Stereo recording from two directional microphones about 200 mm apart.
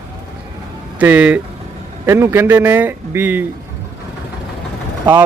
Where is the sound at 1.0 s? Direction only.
10° right (ahead or behind).